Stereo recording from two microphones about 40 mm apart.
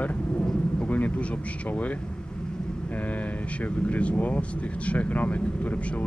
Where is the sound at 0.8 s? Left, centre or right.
Left.